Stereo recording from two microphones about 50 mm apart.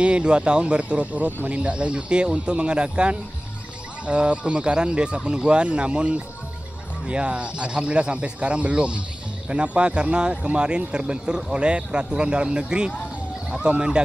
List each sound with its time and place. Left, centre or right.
0.0 s speech: right